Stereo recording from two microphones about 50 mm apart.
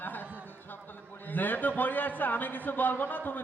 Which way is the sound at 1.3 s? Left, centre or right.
Left.